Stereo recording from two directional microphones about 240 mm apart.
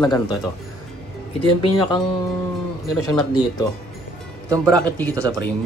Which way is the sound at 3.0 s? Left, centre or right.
Centre.